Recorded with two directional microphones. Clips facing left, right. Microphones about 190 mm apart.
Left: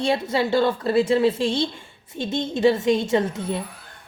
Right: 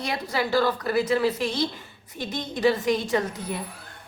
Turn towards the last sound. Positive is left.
turn(degrees=25)  # may be behind; listen again after turning